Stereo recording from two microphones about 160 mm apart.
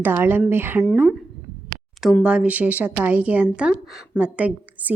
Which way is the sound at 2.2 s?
5° right (ahead or behind).